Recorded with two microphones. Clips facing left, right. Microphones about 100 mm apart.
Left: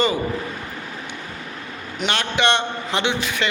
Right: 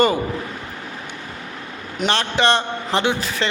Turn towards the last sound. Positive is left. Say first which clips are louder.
# right 2 dB
turn(degrees=-35)  # may be behind; listen again after turning